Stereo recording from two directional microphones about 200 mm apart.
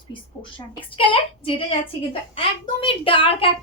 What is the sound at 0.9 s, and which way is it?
Speech, 25° left (ahead or behind).